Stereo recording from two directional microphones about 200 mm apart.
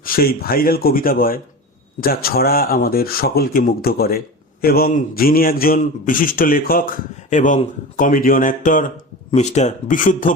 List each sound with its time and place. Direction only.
0.0 s a man's voice: 45° left (ahead or behind)